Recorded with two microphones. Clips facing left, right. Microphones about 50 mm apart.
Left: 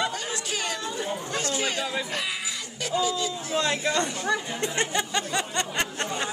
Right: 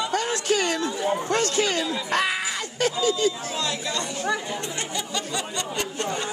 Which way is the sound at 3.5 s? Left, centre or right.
Left.